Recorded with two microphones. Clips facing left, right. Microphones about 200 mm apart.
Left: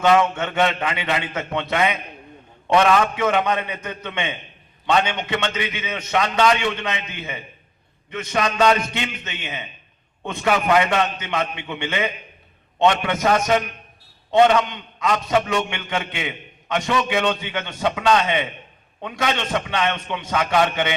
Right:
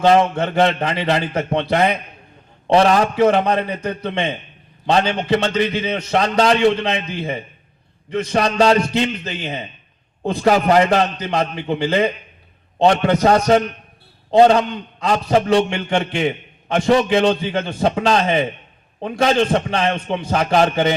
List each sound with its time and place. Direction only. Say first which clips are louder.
0.0 s a man's voice: right 3 dB; 35° right (ahead or behind)